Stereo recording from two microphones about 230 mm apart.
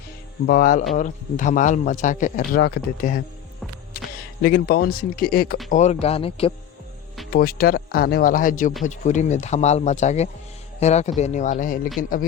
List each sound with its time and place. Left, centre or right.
0.4 s speech: left
4.4 s speech: left
5.7 s speech: left
7.3 s speech: left